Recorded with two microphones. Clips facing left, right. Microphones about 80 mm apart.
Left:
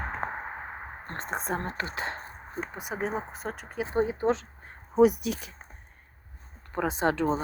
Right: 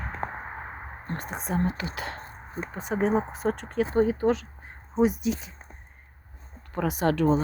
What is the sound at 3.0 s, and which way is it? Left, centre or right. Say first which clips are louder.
Speech: right 8 dB; centre.